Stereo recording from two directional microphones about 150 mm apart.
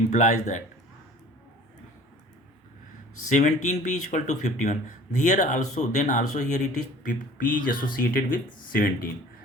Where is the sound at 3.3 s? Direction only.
50° left (ahead or behind).